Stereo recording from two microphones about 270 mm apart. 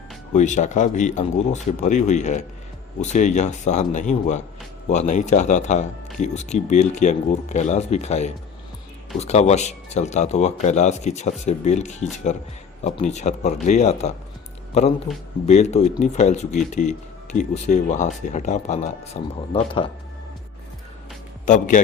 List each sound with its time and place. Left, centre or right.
0.3 s speech: left
21.4 s speech: left